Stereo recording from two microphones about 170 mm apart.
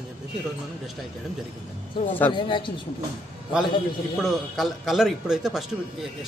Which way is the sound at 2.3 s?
30° left (ahead or behind).